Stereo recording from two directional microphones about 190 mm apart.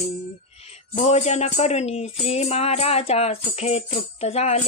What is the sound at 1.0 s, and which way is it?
Jingle bell, 35° left (ahead or behind).